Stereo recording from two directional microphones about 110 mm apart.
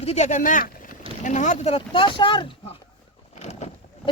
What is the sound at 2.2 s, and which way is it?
Speech, 50° left (ahead or behind).